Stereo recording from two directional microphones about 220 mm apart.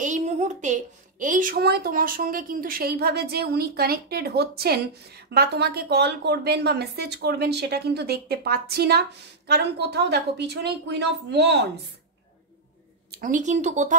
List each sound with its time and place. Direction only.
0.0 s a woman's voice: 30° right (ahead or behind); by 11.8 s 50° right (ahead or behind)
13.1 s speech: 35° right (ahead or behind)